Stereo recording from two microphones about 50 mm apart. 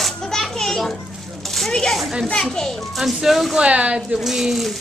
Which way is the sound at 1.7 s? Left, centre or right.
Centre.